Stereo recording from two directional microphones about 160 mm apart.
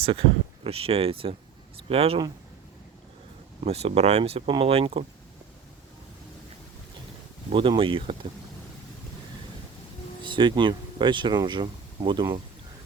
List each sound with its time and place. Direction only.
0.0 s speech: 35° right (ahead or behind)
3.6 s speech: 40° right (ahead or behind)
7.5 s speech: 30° right (ahead or behind)
10.2 s speech: 30° right (ahead or behind)